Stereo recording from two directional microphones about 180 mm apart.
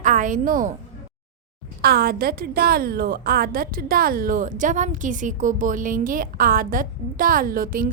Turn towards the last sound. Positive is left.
turn(degrees=-50)  # may be behind; listen again after turning